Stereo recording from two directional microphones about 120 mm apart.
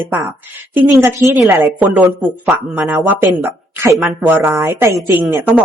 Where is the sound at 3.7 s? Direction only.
15° right (ahead or behind).